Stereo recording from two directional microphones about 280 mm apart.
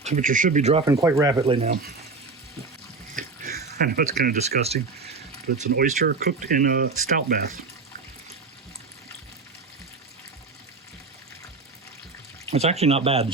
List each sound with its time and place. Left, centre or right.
0.0 s speech: right
1.0 s speech: centre
3.2 s speech: right
12.5 s speech: right